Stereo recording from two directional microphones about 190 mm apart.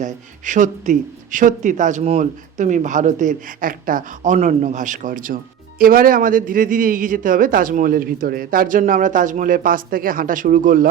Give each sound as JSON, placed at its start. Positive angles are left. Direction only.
{"t": 0.0, "sound": "a man's voice", "side_deg": -40}